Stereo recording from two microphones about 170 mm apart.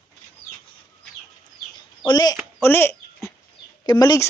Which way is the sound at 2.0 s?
25° left (ahead or behind).